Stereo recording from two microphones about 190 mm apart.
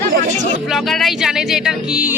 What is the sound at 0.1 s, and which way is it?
Music, 40° right (ahead or behind).